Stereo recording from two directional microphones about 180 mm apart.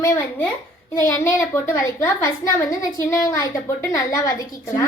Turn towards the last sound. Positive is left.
turn(degrees=20)  # may be behind; listen again after turning